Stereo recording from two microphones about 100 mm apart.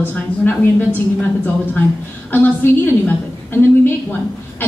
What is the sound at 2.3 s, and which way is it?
A woman's voice, 20° left (ahead or behind).